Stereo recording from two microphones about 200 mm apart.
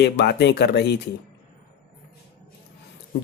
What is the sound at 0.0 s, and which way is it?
A man's voice, 60° left (ahead or behind).